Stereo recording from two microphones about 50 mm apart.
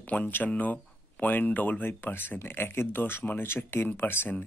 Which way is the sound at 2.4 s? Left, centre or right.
Left.